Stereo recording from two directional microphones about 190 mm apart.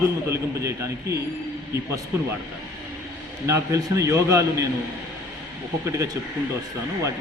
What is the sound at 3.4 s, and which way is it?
A man's voice, 15° right (ahead or behind).